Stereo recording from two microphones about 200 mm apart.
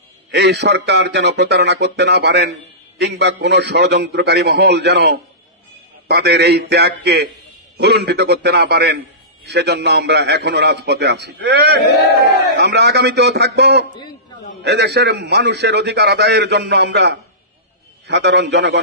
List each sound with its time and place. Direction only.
0.3 s a man's voice: 55° right (ahead or behind)